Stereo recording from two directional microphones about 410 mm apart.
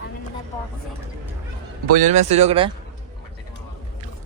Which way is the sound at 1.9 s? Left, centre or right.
Centre.